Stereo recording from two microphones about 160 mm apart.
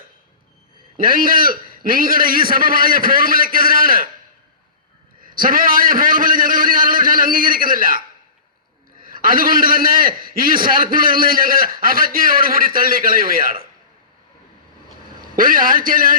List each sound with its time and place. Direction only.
0.9 s a man's voice: 60° right (ahead or behind)
5.2 s a sound: 60° right (ahead or behind)
9.0 s a man's voice: 60° right (ahead or behind)
15.4 s a man's voice: 60° right (ahead or behind)